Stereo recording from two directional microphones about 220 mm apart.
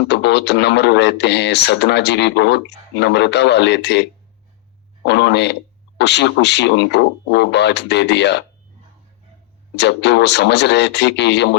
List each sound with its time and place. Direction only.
0.1 s speech: 50° left (ahead or behind)
5.0 s speech: 50° left (ahead or behind)
9.7 s speech: 50° left (ahead or behind)